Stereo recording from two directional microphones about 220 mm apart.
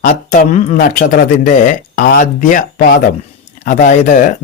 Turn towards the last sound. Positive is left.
turn(degrees=35)  # may be behind; listen again after turning